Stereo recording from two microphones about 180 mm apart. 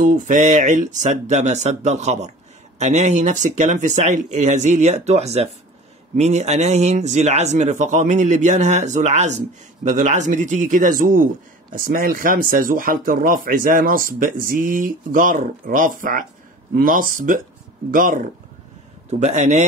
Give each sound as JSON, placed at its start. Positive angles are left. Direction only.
{"t": 0.0, "sound": "speech", "side_deg": -45}
{"t": 19.0, "sound": "speech", "side_deg": -40}